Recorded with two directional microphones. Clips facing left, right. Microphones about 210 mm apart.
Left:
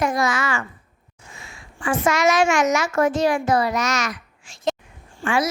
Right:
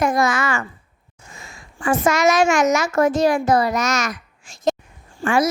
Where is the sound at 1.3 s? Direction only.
40° right (ahead or behind).